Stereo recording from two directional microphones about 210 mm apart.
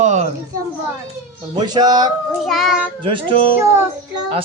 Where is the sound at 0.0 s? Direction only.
35° right (ahead or behind).